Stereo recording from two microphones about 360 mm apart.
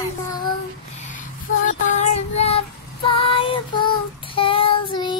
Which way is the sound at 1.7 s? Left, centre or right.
Centre.